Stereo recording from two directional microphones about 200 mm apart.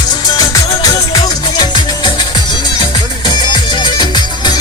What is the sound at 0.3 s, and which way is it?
Music, 20° left (ahead or behind).